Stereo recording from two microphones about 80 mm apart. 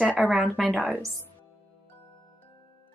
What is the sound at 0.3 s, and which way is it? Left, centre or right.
Speech, centre.